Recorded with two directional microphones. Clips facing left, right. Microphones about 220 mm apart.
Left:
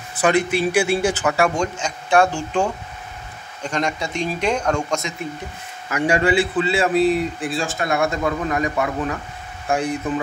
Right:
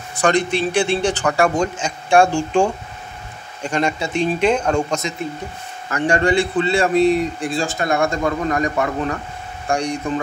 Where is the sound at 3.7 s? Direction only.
30° right (ahead or behind).